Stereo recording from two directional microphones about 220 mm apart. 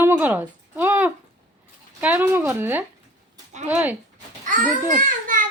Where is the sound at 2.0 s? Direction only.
5° right (ahead or behind).